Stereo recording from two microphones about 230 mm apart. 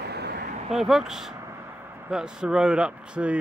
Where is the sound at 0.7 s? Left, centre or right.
Centre.